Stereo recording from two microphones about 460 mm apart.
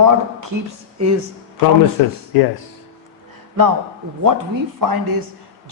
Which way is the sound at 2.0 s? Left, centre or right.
Left.